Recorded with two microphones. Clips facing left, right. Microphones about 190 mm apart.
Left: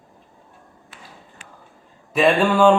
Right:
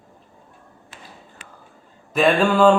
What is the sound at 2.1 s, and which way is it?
Speech, centre (ahead or behind).